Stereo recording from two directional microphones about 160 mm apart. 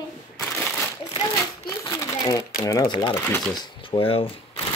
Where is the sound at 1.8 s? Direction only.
25° left (ahead or behind).